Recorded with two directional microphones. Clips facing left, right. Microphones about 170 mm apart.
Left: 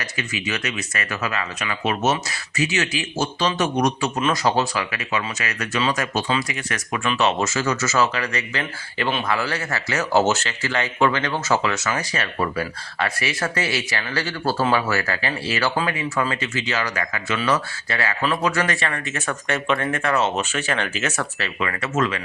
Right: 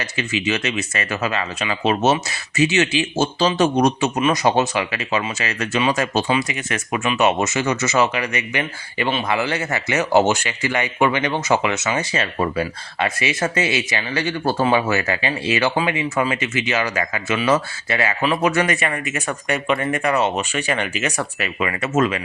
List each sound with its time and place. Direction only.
0.0 s speech: 25° right (ahead or behind)